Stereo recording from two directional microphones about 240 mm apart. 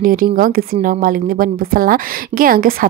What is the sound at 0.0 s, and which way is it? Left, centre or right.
A woman's voice, right.